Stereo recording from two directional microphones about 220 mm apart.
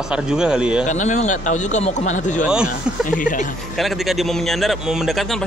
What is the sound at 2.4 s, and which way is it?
Speech, 5° right (ahead or behind).